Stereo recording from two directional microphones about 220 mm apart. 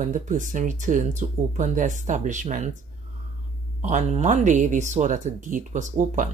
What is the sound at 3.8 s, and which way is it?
Speech, 30° right (ahead or behind).